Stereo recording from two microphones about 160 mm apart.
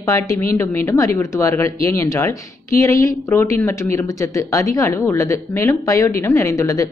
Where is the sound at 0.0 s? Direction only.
20° left (ahead or behind).